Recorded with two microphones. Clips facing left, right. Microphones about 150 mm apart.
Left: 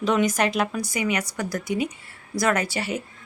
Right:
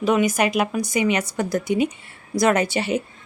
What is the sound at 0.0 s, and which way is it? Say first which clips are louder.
A woman's voice: right 2 dB; 10° right (ahead or behind).